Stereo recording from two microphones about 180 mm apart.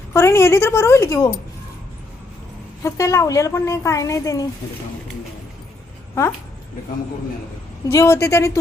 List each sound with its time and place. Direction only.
0.1 s a woman's voice: 15° left (ahead or behind)
2.8 s a woman's voice: 15° left (ahead or behind)
7.9 s a woman's voice: 15° left (ahead or behind)